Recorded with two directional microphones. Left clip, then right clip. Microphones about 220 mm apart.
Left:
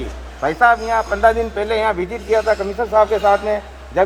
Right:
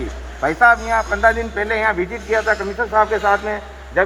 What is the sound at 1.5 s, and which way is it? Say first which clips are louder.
Speech: even; 50° left (ahead or behind).